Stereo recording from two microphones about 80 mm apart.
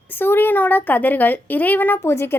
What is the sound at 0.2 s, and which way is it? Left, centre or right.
Speech, left.